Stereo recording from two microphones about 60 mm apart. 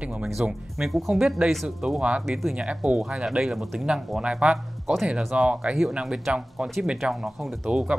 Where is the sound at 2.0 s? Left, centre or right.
Centre.